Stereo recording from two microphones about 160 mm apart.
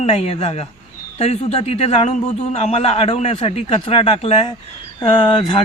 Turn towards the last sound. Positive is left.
turn(degrees=30)  # may be behind; listen again after turning